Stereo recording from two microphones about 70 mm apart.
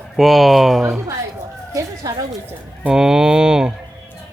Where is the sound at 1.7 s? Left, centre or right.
Right.